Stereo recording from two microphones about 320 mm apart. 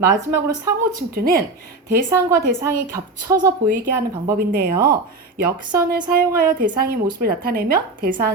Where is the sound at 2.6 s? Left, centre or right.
Centre.